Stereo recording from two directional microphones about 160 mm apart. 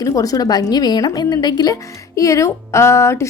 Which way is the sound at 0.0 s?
20° left (ahead or behind).